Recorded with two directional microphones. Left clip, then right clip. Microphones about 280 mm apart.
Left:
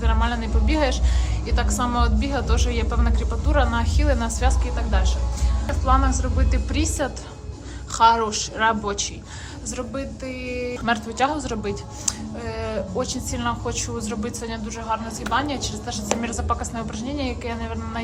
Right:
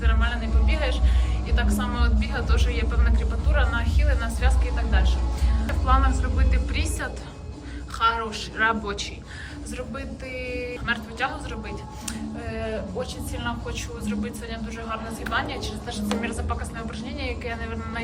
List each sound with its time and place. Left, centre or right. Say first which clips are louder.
0.0 s music: left 4 dB; centre
1.5 s a woman's voice: left 4 dB; centre
5.6 s a woman's voice: left 3 dB; centre